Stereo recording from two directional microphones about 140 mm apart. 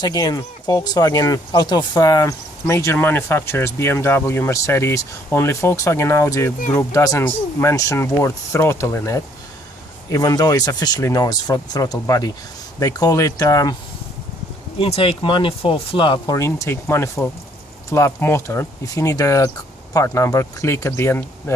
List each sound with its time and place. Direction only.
0.0 s speech: 25° left (ahead or behind)
14.8 s speech: 40° left (ahead or behind); by 21.5 s 15° left (ahead or behind)